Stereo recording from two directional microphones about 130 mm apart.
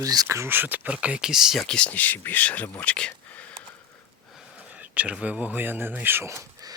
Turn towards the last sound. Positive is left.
turn(degrees=-25)  # may be behind; listen again after turning